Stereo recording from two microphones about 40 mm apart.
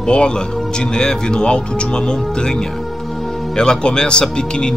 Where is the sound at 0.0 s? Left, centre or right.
Left.